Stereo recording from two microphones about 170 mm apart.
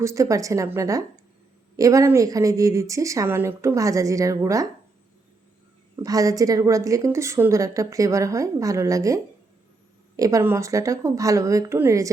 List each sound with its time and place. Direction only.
0.0 s a woman's voice: 20° right (ahead or behind)
6.0 s a woman's voice: 20° right (ahead or behind)